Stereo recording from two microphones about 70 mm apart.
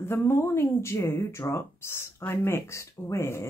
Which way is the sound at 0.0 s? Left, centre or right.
Left.